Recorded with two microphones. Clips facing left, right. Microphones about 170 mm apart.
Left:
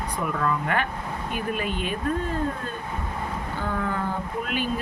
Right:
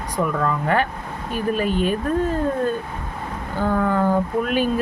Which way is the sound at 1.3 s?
35° right (ahead or behind).